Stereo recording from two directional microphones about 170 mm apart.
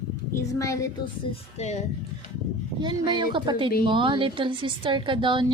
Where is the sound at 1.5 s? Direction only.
40° left (ahead or behind).